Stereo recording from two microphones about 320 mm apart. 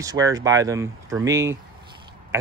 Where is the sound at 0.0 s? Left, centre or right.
Centre.